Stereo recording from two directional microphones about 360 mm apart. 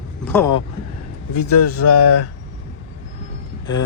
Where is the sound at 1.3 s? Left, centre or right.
Left.